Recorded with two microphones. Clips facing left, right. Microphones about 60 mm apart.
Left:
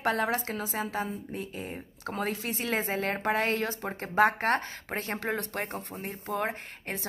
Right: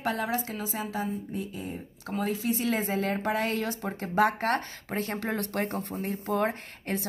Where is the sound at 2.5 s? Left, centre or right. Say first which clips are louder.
Right 3 dB; left.